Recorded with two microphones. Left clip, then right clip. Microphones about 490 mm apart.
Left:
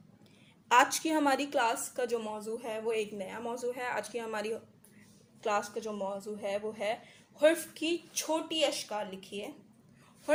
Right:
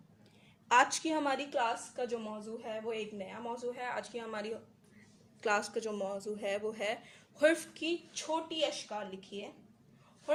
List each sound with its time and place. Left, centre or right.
0.7 s a woman's voice: right
5.4 s speech: right